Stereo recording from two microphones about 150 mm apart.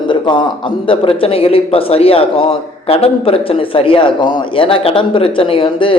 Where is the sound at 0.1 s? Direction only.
30° left (ahead or behind).